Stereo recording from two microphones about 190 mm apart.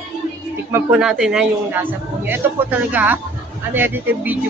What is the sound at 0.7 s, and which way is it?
A man's voice, 5° right (ahead or behind).